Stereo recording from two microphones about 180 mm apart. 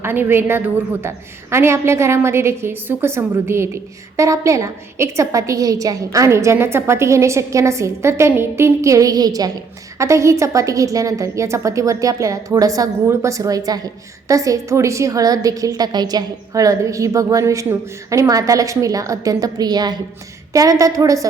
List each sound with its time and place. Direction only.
0.0 s a woman's voice: 10° right (ahead or behind)